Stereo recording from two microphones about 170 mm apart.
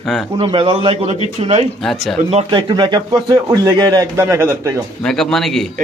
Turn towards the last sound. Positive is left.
turn(degrees=0)  # may be behind; listen again after turning